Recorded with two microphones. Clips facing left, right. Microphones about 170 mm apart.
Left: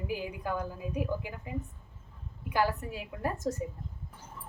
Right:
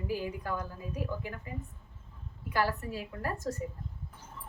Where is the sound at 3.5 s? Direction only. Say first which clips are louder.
Left 4 dB; 20° left (ahead or behind).